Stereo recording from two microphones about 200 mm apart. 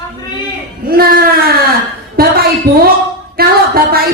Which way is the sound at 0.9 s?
50° right (ahead or behind).